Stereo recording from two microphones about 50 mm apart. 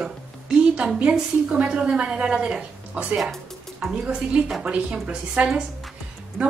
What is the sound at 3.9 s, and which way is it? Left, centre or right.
A woman's voice, right.